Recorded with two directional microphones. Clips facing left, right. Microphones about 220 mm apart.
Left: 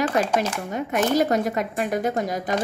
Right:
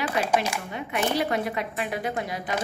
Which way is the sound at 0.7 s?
45° left (ahead or behind).